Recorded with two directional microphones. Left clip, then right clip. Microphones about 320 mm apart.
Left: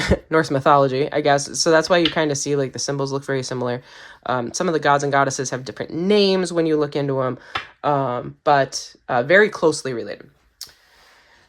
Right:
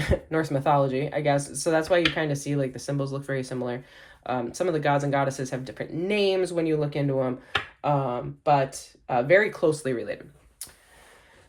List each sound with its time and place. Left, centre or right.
0.0 s speech: left